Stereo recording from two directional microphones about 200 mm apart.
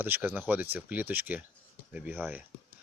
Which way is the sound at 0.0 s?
10° right (ahead or behind).